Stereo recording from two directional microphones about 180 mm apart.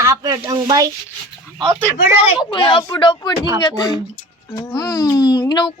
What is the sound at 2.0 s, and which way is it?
Speech, 10° right (ahead or behind).